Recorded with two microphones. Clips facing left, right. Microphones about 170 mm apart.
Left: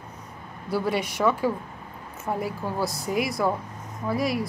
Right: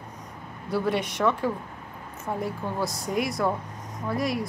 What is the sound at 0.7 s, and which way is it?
Speech, centre (ahead or behind).